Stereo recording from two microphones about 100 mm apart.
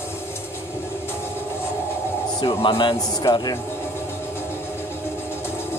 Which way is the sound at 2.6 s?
55° left (ahead or behind).